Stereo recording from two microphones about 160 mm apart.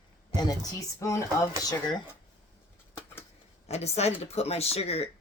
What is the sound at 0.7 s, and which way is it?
Speech, 20° left (ahead or behind).